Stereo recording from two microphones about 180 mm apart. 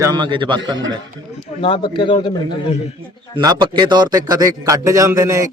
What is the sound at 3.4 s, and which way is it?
Speech, 25° right (ahead or behind).